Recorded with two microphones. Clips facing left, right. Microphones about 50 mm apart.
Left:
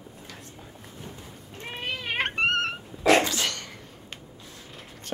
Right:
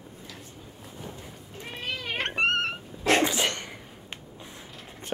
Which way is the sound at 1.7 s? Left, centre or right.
Left.